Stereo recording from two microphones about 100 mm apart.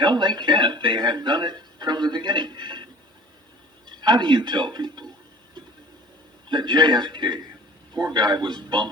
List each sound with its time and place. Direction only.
0.0 s speech: 50° right (ahead or behind)
6.5 s speech: 50° right (ahead or behind)